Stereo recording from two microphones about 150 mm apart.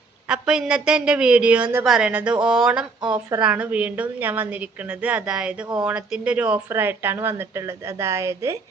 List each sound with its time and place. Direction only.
0.3 s speech: 5° right (ahead or behind)
3.1 s a woman's voice: 30° right (ahead or behind)
3.4 s speech: 10° right (ahead or behind)